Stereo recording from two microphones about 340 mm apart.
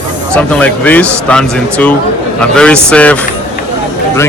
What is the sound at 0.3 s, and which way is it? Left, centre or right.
Speech, centre.